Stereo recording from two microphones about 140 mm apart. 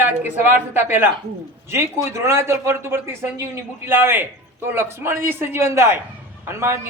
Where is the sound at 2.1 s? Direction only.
20° right (ahead or behind).